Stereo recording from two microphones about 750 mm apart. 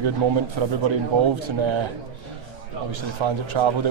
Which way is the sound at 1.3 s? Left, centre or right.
Right.